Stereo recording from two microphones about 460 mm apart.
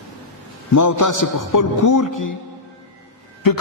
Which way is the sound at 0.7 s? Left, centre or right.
Left.